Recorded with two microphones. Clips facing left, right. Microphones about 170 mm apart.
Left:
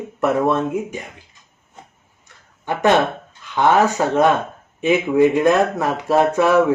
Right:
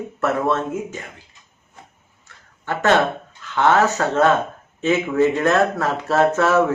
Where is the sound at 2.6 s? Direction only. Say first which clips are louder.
Left 1 dB; 15° left (ahead or behind).